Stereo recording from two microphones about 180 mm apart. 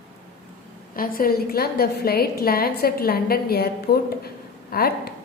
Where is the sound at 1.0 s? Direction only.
55° left (ahead or behind).